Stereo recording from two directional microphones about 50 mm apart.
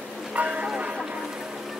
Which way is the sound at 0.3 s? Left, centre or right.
Right.